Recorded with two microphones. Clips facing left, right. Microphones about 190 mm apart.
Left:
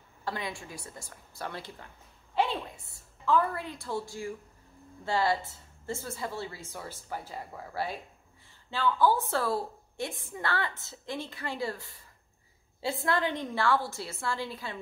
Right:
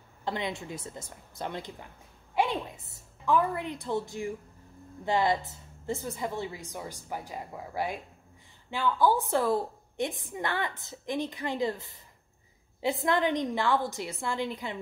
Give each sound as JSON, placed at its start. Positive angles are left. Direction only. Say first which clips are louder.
{"t": 0.2, "sound": "a woman's voice", "louder": "right 3 dB", "side_deg": -20}